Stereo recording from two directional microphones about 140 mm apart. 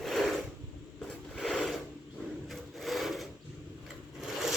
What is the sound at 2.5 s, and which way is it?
Wood, centre (ahead or behind).